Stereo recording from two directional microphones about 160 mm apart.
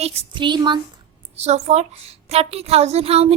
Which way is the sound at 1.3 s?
40° right (ahead or behind).